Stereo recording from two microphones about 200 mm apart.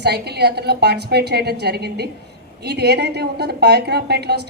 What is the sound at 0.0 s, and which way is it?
A woman's voice, 55° right (ahead or behind).